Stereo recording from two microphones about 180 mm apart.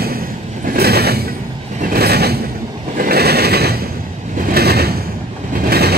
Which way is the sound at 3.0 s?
60° right (ahead or behind).